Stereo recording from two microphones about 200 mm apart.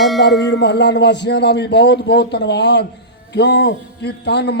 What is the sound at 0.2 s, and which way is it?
A man's voice, 60° left (ahead or behind).